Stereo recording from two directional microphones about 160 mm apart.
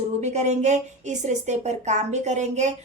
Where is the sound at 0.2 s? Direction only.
45° right (ahead or behind).